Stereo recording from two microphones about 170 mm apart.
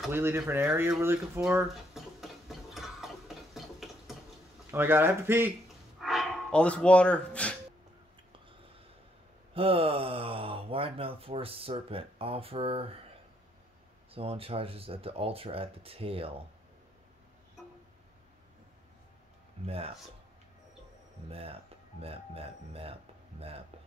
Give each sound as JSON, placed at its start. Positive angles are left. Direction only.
{"t": 0.1, "sound": "speech", "side_deg": -15}
{"t": 1.7, "sound": "stir", "side_deg": 0}
{"t": 4.6, "sound": "speech", "side_deg": -15}
{"t": 5.9, "sound": "a sound", "side_deg": 0}
{"t": 9.5, "sound": "speech", "side_deg": -35}
{"t": 14.1, "sound": "speech", "side_deg": -35}
{"t": 19.6, "sound": "speech", "side_deg": -35}
{"t": 21.3, "sound": "speech", "side_deg": -35}